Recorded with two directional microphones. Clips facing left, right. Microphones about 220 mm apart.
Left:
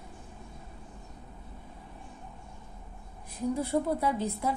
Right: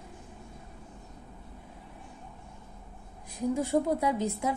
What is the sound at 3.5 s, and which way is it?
Speech, 15° right (ahead or behind).